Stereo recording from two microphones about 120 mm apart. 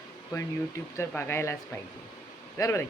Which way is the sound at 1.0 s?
20° left (ahead or behind).